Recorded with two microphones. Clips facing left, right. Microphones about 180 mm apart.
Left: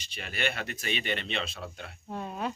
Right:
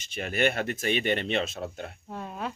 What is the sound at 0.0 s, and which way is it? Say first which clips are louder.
Speech: right 7 dB; 50° right (ahead or behind).